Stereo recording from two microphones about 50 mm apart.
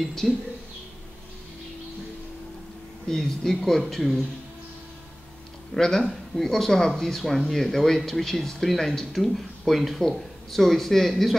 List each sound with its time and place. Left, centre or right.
0.0 s speech: centre
3.1 s speech: centre
5.8 s speech: centre